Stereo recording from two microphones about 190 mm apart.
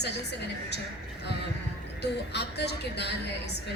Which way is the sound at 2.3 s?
60° left (ahead or behind).